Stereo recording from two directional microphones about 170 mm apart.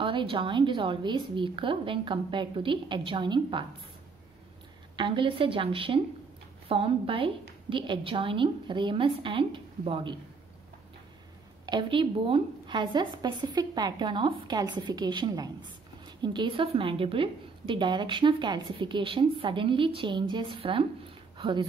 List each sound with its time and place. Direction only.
0.0 s a woman's voice: 30° right (ahead or behind)
4.9 s a woman's voice: 30° right (ahead or behind)
11.6 s a woman's voice: 25° right (ahead or behind)